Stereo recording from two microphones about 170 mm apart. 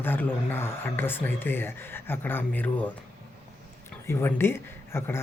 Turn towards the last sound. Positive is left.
turn(degrees=15)  # may be behind; listen again after turning